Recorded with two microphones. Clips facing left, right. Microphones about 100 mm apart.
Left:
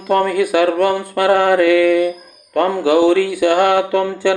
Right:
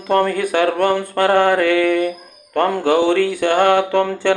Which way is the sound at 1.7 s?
50° right (ahead or behind).